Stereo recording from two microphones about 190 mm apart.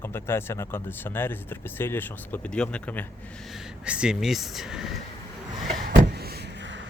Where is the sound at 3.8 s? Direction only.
5° right (ahead or behind).